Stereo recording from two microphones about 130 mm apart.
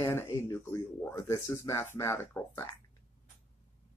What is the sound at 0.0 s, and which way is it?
Speech, 20° left (ahead or behind).